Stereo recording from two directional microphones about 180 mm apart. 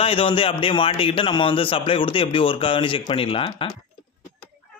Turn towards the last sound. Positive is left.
turn(degrees=30)  # may be behind; listen again after turning